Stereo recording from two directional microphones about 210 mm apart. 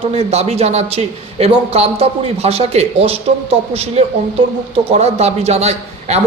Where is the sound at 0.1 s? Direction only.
30° right (ahead or behind).